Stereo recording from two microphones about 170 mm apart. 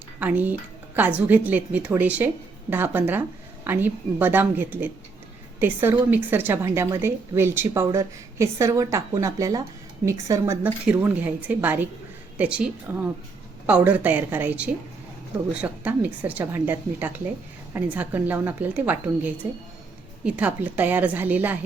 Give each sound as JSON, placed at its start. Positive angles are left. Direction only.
{"t": 0.2, "sound": "a woman's voice", "side_deg": -10}